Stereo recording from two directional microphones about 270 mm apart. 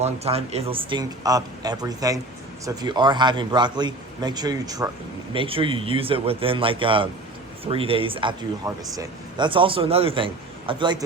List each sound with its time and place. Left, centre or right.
0.0 s speech: right